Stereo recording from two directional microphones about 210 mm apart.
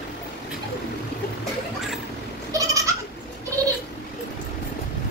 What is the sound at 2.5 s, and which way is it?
Goat, 15° right (ahead or behind).